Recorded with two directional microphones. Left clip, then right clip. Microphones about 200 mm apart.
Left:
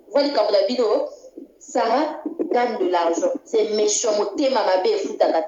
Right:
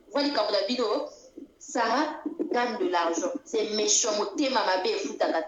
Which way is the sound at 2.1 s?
35° left (ahead or behind).